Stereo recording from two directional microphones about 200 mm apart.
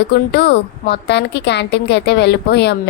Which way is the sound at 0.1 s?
55° left (ahead or behind).